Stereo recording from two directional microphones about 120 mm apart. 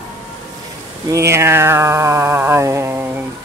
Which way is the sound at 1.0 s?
25° right (ahead or behind).